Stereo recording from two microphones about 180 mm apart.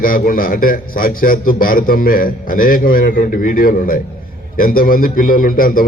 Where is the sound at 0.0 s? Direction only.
55° left (ahead or behind).